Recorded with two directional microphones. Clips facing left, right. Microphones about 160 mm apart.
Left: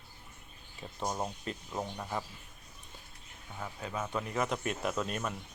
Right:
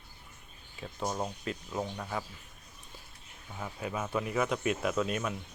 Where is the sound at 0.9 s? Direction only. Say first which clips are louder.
Right 1 dB; 5° left (ahead or behind).